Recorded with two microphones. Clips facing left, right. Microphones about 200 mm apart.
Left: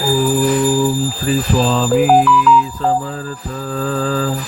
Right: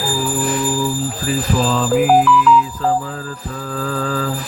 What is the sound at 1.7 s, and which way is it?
Mantra, 25° left (ahead or behind).